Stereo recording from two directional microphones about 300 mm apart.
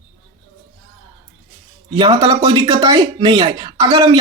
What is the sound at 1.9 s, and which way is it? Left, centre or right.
Speech, centre.